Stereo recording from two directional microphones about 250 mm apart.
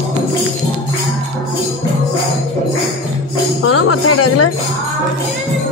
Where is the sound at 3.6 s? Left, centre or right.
Left.